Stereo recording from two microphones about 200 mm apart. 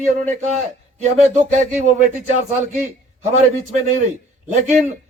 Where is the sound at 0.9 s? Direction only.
35° right (ahead or behind).